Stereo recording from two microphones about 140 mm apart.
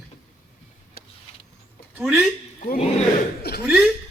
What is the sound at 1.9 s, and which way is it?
Speech, 5° right (ahead or behind).